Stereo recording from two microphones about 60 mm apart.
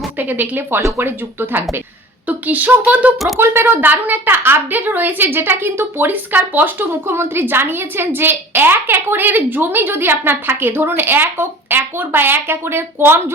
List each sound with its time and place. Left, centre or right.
0.2 s a woman's voice: right
0.8 s speech: right
1.0 s a woman's voice: right
3.3 s a woman's voice: right